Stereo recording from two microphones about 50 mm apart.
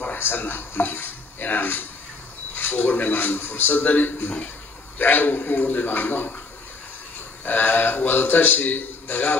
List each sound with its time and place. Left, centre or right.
0.0 s a sound: left
4.9 s a man's voice: left
7.4 s a man's voice: left